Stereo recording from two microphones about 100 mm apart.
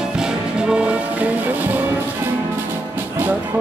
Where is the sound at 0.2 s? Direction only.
10° right (ahead or behind).